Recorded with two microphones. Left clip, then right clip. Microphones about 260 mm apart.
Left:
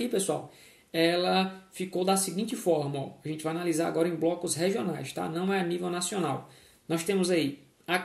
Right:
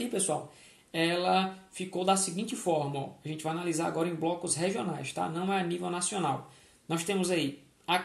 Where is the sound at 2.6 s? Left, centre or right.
Right.